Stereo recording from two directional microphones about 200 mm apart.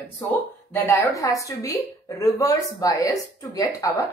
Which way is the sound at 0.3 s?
10° left (ahead or behind).